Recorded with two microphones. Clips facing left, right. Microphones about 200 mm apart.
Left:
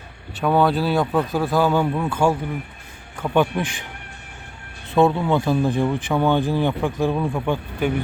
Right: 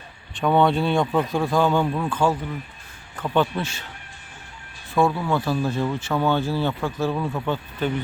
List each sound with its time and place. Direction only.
0.3 s speech: 5° left (ahead or behind)
4.9 s speech: 20° left (ahead or behind)